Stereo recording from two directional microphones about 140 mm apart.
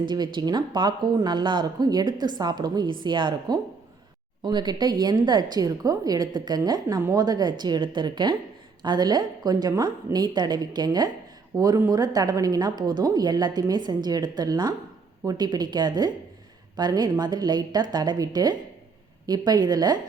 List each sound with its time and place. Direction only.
0.1 s a woman's voice: 30° right (ahead or behind)